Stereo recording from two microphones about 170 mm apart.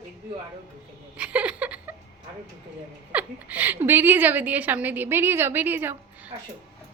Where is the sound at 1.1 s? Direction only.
10° right (ahead or behind).